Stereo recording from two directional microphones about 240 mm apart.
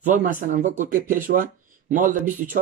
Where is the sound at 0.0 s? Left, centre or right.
Right.